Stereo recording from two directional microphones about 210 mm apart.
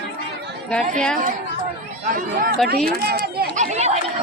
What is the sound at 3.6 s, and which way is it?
Chatter, 30° right (ahead or behind).